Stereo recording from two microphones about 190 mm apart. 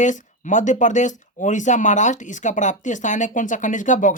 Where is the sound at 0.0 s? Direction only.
40° left (ahead or behind).